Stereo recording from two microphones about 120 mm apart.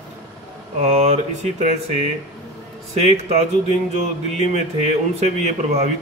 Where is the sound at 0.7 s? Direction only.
70° right (ahead or behind).